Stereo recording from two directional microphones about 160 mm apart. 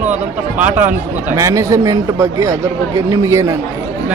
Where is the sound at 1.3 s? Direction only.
20° right (ahead or behind).